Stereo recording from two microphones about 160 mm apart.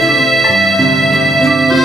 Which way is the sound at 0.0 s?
Centre (ahead or behind).